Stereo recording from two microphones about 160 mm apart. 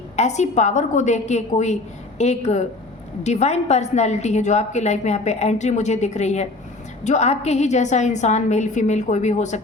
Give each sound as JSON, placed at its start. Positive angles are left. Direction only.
{"t": 0.2, "sound": "a woman's voice", "side_deg": 45}